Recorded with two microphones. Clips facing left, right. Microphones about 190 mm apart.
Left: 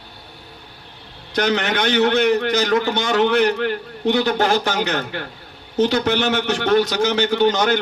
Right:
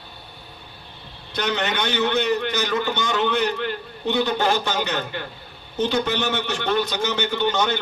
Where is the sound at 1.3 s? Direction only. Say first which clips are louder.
Left 5 dB; 80° left.